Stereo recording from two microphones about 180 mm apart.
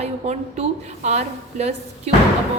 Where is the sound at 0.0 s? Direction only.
35° right (ahead or behind).